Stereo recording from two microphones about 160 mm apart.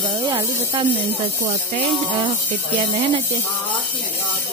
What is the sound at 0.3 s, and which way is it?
Speech, 30° right (ahead or behind).